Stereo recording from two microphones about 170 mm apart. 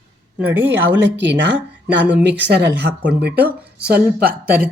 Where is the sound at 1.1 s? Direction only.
90° right.